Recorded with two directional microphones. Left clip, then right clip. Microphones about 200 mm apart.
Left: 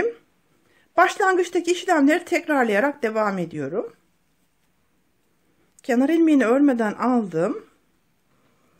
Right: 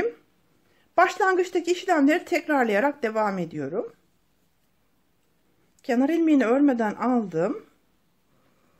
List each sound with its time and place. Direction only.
0.7 s speech: 20° left (ahead or behind)
5.8 s speech: 20° left (ahead or behind)